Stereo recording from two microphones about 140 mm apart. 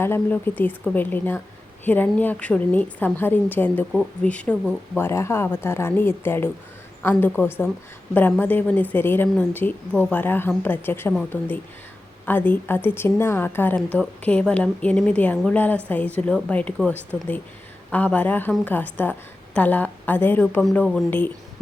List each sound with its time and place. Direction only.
0.0 s a woman's voice: 15° left (ahead or behind)